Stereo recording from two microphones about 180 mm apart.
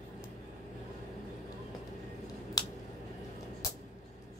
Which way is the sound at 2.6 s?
20° left (ahead or behind).